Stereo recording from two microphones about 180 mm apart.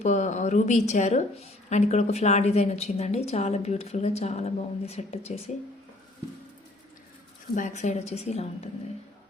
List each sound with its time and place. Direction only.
0.0 s a woman's voice: 40° left (ahead or behind)
7.5 s a woman's voice: 40° left (ahead or behind)